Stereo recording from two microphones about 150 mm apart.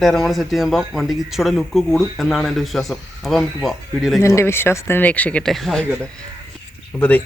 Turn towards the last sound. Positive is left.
turn(degrees=5)  # may be behind; listen again after turning